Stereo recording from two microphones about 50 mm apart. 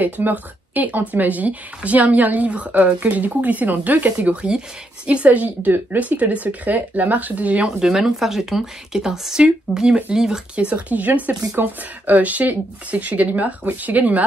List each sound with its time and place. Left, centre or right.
0.0 s a woman's voice: right
7.6 s a woman's voice: centre
10.5 s a woman's voice: right